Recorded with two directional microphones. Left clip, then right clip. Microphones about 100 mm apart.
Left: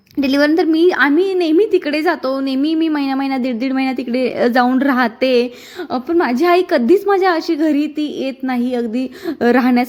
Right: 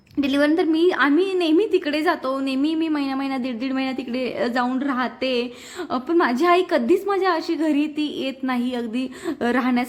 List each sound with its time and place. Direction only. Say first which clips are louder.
0.2 s a woman's voice: left 5 dB; 45° left (ahead or behind)
5.9 s a woman's voice: left 4 dB; 25° left (ahead or behind); by 9.8 s 45° left (ahead or behind)